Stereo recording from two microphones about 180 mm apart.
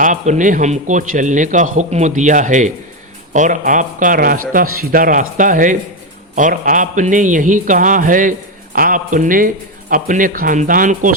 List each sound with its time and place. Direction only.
0.0 s a man's voice: 45° right (ahead or behind)